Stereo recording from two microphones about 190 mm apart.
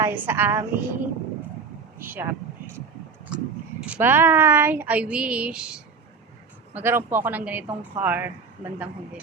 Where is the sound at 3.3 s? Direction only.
5° right (ahead or behind).